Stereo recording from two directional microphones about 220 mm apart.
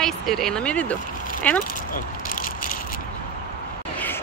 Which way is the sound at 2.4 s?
40° left (ahead or behind).